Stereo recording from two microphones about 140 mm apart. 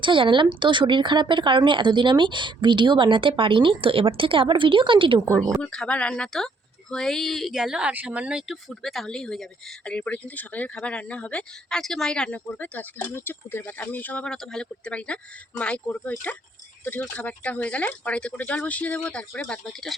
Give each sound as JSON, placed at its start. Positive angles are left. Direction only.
{"t": 0.0, "sound": "speech", "side_deg": -35}
{"t": 5.6, "sound": "speech", "side_deg": 5}